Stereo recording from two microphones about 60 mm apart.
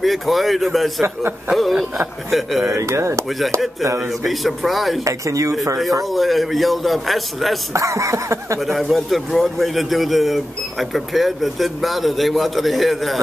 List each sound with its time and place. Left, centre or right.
0.0 s a man's voice: centre
2.7 s speech: right
3.3 s a man's voice: centre
5.0 s speech: right
6.0 s a man's voice: centre
7.7 s speech: right
8.5 s a man's voice: centre